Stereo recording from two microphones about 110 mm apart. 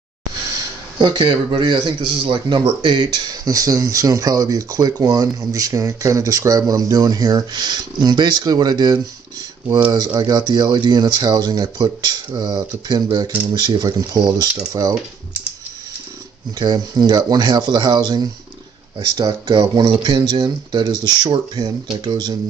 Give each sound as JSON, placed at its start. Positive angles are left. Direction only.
{"t": 0.9, "sound": "speech", "side_deg": -40}
{"t": 16.5, "sound": "speech", "side_deg": -40}